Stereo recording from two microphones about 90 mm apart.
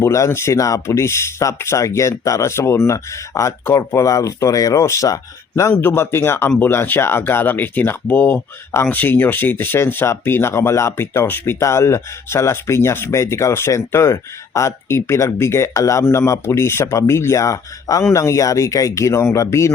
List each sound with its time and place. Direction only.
0.0 s speech: 30° left (ahead or behind)
5.8 s speech: 25° left (ahead or behind)